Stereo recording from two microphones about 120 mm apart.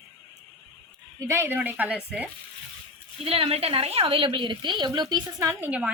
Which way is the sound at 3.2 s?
55° right (ahead or behind).